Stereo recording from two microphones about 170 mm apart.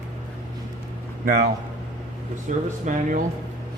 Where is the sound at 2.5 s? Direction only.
45° right (ahead or behind).